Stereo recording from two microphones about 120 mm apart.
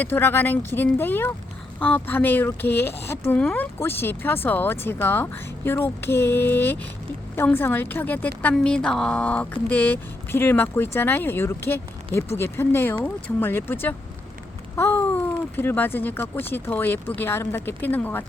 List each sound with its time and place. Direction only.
0.0 s a woman's voice: 20° left (ahead or behind)